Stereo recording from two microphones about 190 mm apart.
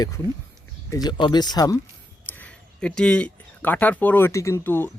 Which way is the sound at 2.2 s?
10° left (ahead or behind).